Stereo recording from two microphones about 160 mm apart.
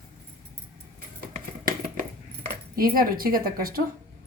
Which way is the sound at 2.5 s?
65° right (ahead or behind).